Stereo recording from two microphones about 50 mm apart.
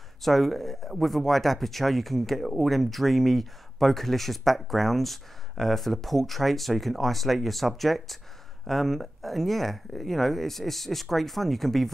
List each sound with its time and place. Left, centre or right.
0.2 s speech: centre